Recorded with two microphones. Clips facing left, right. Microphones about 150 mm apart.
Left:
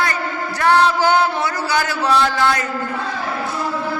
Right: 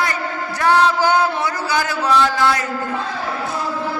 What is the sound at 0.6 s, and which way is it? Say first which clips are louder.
Chant: even; 10° right (ahead or behind).